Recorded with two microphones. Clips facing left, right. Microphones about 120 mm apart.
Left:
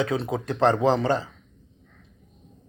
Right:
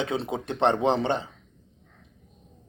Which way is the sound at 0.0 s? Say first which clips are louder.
Left 3 dB; 25° right (ahead or behind).